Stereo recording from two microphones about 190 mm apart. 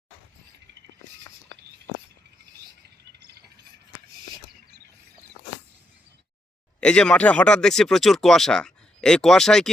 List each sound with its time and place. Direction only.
3.2 s mechanisms: 60° right (ahead or behind)
6.7 s speech: 5° left (ahead or behind)